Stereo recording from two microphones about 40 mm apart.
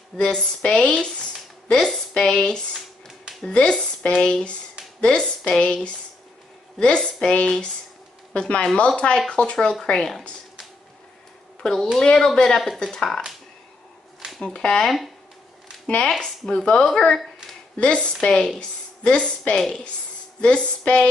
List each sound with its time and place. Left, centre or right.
0.2 s speech: left
3.1 s music: centre
3.4 s speech: left
7.0 s speech: left
9.9 s speech: centre
11.6 s speech: centre
12.4 s speech: centre
12.9 s speech: centre
14.4 s speech: centre
16.1 s speech: centre
17.7 s a woman's voice: left